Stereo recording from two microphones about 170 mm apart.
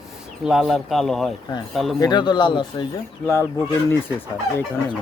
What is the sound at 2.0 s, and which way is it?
Speech, 25° left (ahead or behind).